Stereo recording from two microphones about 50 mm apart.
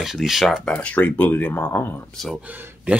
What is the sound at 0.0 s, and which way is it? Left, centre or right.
Speech, centre.